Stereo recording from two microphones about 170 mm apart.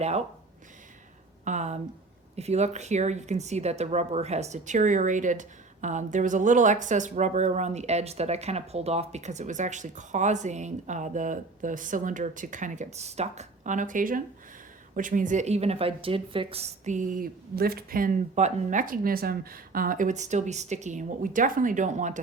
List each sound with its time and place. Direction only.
0.0 s speech: 40° right (ahead or behind)
1.5 s speech: 45° right (ahead or behind)